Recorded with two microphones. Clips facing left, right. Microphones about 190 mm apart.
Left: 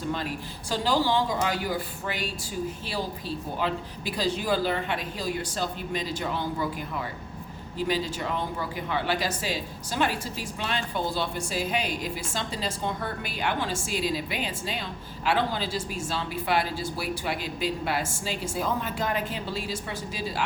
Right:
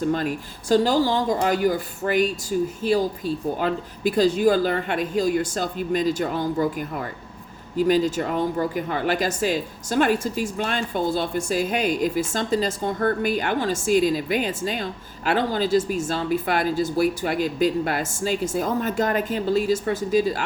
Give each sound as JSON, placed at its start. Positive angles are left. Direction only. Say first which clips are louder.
{"t": 0.1, "sound": "a woman's voice", "louder": "right 7 dB", "side_deg": -45}